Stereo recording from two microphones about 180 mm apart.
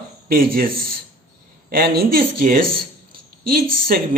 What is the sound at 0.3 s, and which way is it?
Speech, 55° right (ahead or behind).